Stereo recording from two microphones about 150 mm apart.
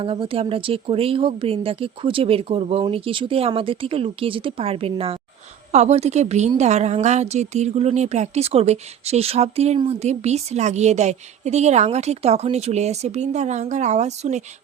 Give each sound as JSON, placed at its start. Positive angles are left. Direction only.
{"t": 0.0, "sound": "a woman's voice", "side_deg": -35}